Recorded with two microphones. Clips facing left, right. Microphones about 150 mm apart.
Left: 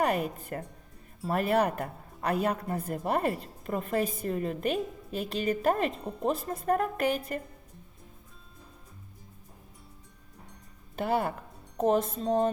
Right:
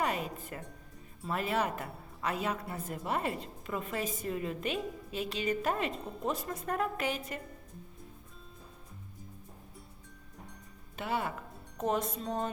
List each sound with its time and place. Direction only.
0.0 s a woman's voice: 55° left (ahead or behind)
10.9 s a woman's voice: 45° left (ahead or behind)
11.8 s speech: 30° left (ahead or behind)